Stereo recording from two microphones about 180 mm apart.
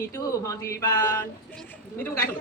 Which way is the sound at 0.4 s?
15° left (ahead or behind).